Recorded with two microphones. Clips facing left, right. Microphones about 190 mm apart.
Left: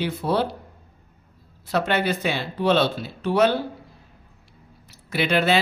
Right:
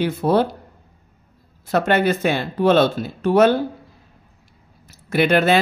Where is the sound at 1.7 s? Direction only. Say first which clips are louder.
Right 5 dB; 50° right (ahead or behind).